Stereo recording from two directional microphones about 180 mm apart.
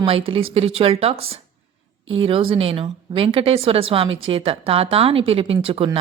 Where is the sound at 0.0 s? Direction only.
30° right (ahead or behind).